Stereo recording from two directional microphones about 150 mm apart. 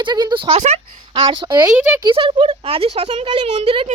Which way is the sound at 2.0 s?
35° right (ahead or behind).